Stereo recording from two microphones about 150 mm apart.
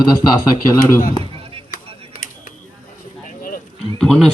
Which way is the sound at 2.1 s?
65° left (ahead or behind).